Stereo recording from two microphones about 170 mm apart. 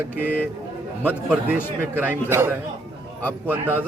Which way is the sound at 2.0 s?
15° right (ahead or behind).